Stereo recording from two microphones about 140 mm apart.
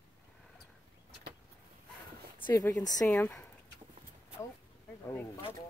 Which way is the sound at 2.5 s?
20° left (ahead or behind).